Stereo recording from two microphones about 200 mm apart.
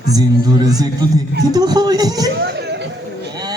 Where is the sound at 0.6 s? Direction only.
20° right (ahead or behind).